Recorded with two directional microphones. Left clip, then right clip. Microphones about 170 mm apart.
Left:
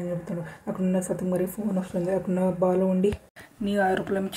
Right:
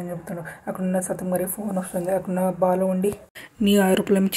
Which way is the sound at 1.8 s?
15° right (ahead or behind).